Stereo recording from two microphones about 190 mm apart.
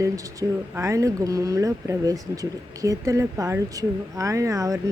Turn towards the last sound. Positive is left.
turn(degrees=-15)  # may be behind; listen again after turning